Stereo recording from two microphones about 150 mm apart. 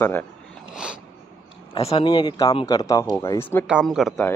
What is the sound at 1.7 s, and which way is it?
Speech, 40° left (ahead or behind).